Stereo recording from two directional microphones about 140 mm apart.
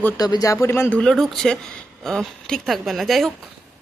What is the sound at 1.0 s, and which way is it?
Speech, centre (ahead or behind).